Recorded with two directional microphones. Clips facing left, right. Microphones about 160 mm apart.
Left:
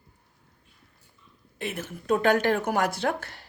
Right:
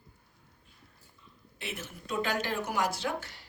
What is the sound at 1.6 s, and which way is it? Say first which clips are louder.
Speech: left 7 dB; 55° left (ahead or behind).